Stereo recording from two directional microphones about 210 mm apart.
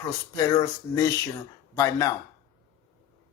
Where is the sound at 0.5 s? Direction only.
15° left (ahead or behind).